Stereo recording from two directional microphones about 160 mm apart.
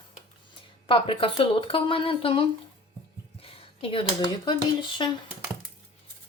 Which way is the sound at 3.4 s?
35° left (ahead or behind).